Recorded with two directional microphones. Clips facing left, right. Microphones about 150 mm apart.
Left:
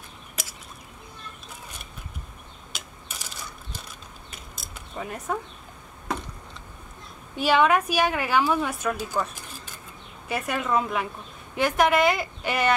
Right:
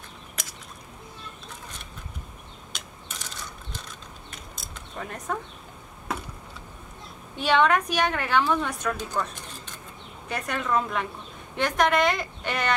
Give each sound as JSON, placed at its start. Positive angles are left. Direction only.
{"t": 0.4, "sound": "a sound", "side_deg": 5}
{"t": 2.7, "sound": "mechanisms", "side_deg": 10}
{"t": 4.3, "sound": "pulleys", "side_deg": 5}
{"t": 7.3, "sound": "a woman's voice", "side_deg": 5}